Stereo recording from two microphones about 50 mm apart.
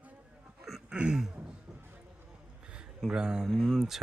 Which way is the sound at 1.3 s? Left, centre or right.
Right.